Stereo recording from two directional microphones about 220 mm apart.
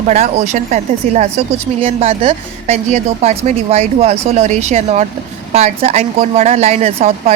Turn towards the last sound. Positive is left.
turn(degrees=-30)  # may be behind; listen again after turning